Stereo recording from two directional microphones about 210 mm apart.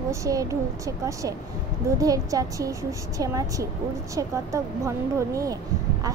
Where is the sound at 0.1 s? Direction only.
15° right (ahead or behind).